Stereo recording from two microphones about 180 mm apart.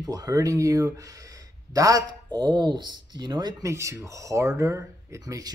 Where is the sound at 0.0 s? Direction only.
20° right (ahead or behind).